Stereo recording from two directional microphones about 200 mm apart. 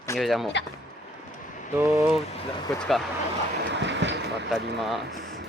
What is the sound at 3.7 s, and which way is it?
Vehicle, 60° right (ahead or behind).